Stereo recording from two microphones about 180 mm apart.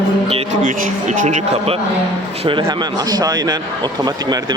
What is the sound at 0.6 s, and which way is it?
Speech, 45° right (ahead or behind).